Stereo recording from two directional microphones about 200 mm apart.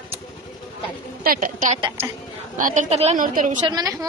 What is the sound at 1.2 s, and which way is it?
A woman's voice, 45° right (ahead or behind).